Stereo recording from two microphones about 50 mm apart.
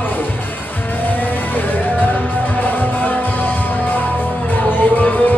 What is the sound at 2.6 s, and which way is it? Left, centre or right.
Music, left.